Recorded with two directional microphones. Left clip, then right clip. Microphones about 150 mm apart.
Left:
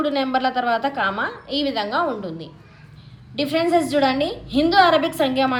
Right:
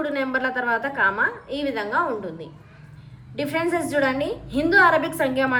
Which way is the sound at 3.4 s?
15° left (ahead or behind).